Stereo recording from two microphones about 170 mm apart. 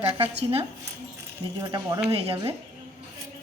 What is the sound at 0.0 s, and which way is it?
Speech, 35° right (ahead or behind).